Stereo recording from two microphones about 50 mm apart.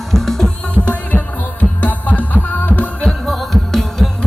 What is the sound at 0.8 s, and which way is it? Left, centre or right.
Music, left.